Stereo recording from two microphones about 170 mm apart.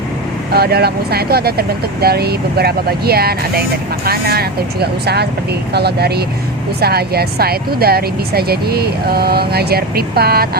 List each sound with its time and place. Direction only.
0.5 s speech: 70° right (ahead or behind)